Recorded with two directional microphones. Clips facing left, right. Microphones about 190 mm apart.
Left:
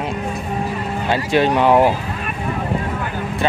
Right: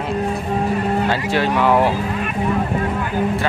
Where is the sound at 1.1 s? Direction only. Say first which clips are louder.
Left 2 dB; 20° left (ahead or behind).